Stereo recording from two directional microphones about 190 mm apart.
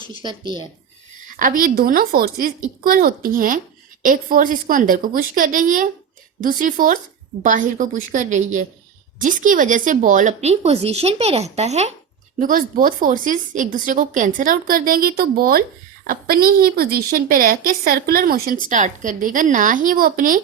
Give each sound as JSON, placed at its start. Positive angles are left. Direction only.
{"t": 0.2, "sound": "speech", "side_deg": -25}
{"t": 1.4, "sound": "a woman's voice", "side_deg": -45}
{"t": 12.4, "sound": "a woman's voice", "side_deg": -45}